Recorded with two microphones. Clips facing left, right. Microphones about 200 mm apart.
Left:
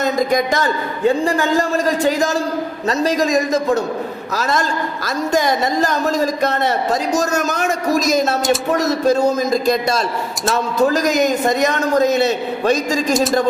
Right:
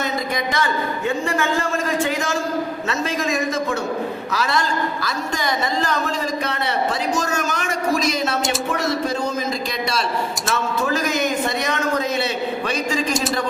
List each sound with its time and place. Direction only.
0.0 s a man's voice: 45° left (ahead or behind)